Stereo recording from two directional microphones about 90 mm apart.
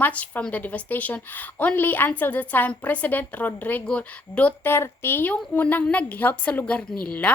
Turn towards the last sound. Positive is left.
turn(degrees=15)  # may be behind; listen again after turning